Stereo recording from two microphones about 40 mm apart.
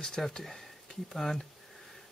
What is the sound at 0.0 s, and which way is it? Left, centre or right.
Speech, centre.